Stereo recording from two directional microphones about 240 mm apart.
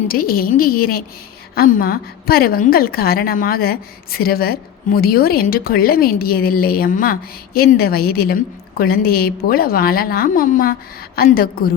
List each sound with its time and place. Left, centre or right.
0.1 s a woman's voice: left